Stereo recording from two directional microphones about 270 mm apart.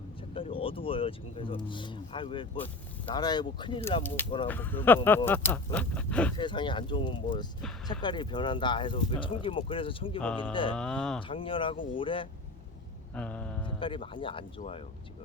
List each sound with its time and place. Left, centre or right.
0.3 s speech: centre
4.4 s speech: centre
6.3 s speech: centre
10.2 s music: centre
10.5 s speech: centre
10.8 s music: centre
11.2 s speech: centre
13.1 s music: centre
13.7 s speech: centre